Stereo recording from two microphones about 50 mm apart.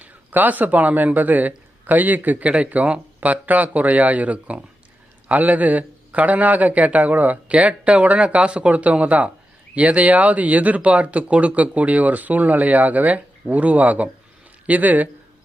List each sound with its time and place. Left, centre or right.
0.0 s a man's voice: right